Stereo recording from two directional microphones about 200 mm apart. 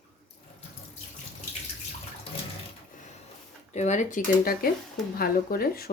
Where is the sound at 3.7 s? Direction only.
35° left (ahead or behind).